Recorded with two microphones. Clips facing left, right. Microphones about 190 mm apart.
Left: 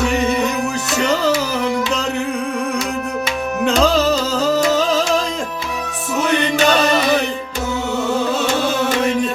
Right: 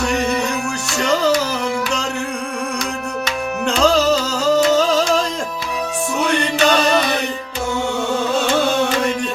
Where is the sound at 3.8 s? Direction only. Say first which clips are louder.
Right 1 dB; centre (ahead or behind).